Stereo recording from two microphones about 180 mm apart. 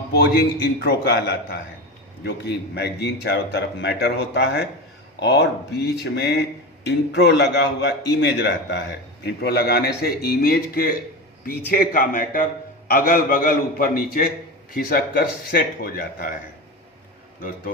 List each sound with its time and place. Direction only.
0.1 s a man's voice: 60° left (ahead or behind)